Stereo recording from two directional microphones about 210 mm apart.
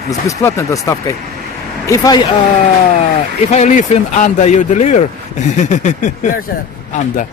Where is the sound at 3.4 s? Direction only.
35° left (ahead or behind).